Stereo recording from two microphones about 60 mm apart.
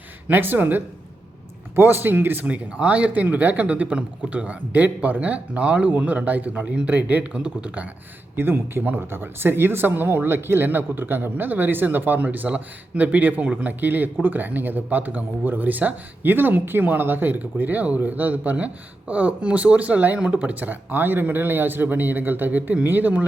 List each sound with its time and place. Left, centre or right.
0.3 s speech: right
8.4 s speech: right